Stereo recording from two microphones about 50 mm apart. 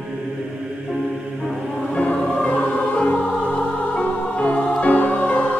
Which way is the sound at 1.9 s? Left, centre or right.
Left.